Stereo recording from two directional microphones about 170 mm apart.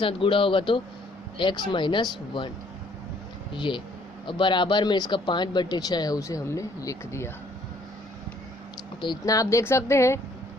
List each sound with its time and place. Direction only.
0.0 s speech: 30° left (ahead or behind)
3.5 s speech: 30° left (ahead or behind)
9.0 s a woman's voice: 25° left (ahead or behind)